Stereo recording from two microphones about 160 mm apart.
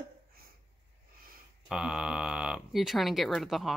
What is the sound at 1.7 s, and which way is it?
Speech, 5° right (ahead or behind).